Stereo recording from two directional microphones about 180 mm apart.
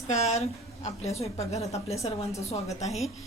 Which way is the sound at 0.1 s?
35° left (ahead or behind).